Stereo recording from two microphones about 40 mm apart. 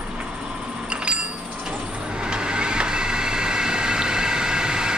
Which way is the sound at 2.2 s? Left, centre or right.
Right.